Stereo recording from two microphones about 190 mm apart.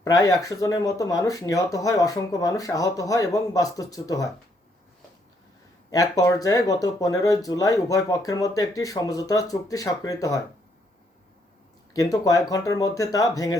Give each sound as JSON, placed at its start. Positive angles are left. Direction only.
{"t": 0.0, "sound": "speech", "side_deg": 20}
{"t": 5.9, "sound": "speech", "side_deg": 20}
{"t": 11.9, "sound": "speech", "side_deg": 20}